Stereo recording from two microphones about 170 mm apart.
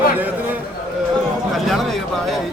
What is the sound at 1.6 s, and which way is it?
Speech, centre (ahead or behind).